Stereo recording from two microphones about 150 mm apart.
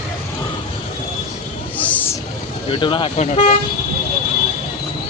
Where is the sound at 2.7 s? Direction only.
35° left (ahead or behind).